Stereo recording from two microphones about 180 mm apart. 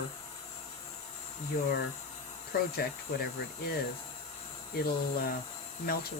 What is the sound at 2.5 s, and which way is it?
Speech, 60° left (ahead or behind).